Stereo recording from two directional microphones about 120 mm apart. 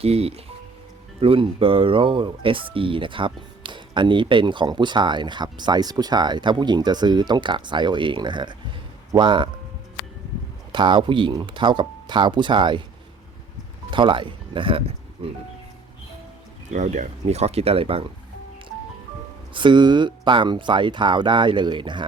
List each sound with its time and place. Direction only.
0.0 s speech: 55° right (ahead or behind); by 9.5 s 40° right (ahead or behind)
10.7 s speech: 40° right (ahead or behind)
13.9 s speech: 45° right (ahead or behind)
16.7 s speech: 80° right; by 18.0 s 50° right (ahead or behind)
19.5 s speech: 40° right (ahead or behind)